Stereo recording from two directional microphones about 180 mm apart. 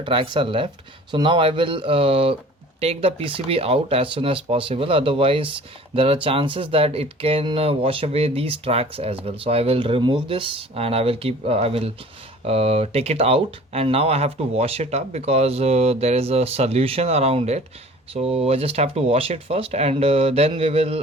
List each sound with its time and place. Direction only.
0.0 s speech: 25° right (ahead or behind)